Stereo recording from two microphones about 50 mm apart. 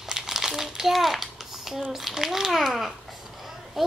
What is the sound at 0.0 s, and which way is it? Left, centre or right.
Crumpling, centre.